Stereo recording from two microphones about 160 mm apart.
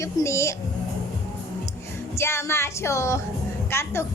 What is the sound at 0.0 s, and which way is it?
Speech, 20° left (ahead or behind).